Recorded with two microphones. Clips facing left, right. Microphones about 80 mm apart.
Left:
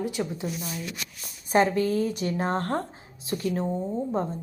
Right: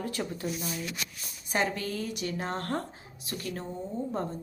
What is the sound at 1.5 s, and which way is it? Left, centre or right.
A woman's voice, left.